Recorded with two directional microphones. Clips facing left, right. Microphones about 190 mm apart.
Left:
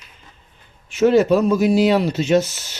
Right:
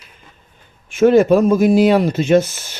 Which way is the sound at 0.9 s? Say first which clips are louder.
Right 3 dB; 50° right (ahead or behind).